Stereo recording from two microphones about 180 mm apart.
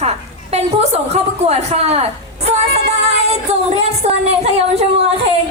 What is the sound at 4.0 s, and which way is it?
Speech, 35° right (ahead or behind).